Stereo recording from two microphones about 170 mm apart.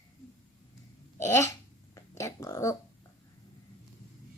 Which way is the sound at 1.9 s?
20° left (ahead or behind).